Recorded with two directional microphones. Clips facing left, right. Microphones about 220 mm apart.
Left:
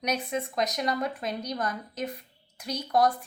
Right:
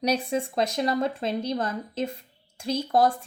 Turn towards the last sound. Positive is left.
turn(degrees=-25)  # may be behind; listen again after turning